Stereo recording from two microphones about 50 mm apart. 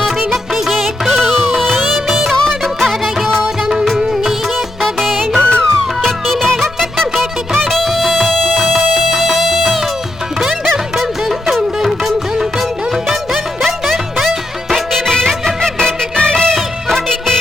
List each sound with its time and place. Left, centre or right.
0.5 s music: centre
3.7 s music: centre
5.4 s music: left
6.0 s music: centre
10.9 s music: centre
15.0 s music of bollywood: centre